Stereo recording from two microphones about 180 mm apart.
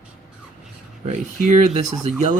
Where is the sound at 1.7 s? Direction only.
35° right (ahead or behind).